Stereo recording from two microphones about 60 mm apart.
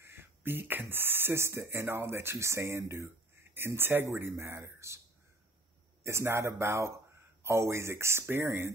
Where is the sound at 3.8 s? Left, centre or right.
Right.